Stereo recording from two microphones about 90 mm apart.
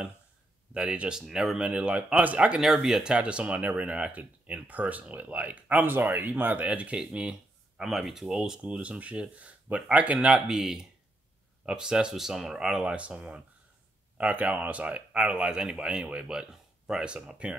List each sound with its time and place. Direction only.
0.7 s speech: 10° right (ahead or behind)
2.6 s speech: 5° right (ahead or behind)